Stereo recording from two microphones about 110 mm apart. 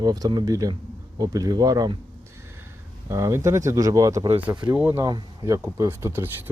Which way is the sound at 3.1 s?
25° right (ahead or behind).